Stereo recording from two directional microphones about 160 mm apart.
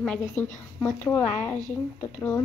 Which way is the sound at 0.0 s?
5° left (ahead or behind).